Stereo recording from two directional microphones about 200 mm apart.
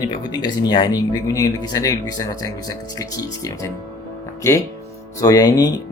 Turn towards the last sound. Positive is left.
turn(degrees=20)  # may be behind; listen again after turning